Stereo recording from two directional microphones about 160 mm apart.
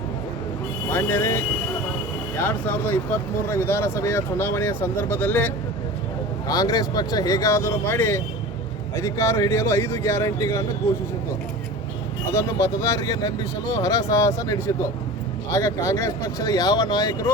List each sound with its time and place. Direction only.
0.9 s speech: 15° left (ahead or behind)
6.5 s speech: 25° left (ahead or behind)
12.3 s speech: 15° left (ahead or behind)